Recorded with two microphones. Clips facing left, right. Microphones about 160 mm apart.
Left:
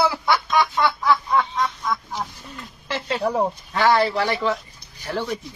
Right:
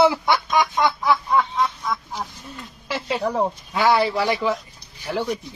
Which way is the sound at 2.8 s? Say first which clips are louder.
Right 1 dB; 10° right (ahead or behind).